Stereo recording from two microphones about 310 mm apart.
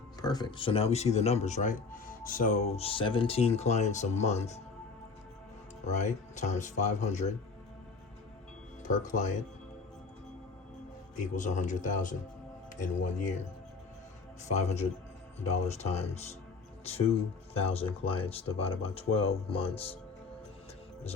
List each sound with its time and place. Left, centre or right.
0.2 s a man's voice: centre
5.8 s a man's voice: left
8.8 s speech: left
11.2 s a man's voice: left
14.4 s a man's voice: left
17.5 s a man's voice: centre